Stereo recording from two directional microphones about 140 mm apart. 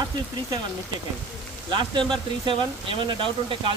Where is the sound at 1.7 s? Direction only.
35° right (ahead or behind).